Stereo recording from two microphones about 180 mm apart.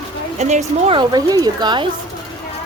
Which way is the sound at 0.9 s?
20° right (ahead or behind).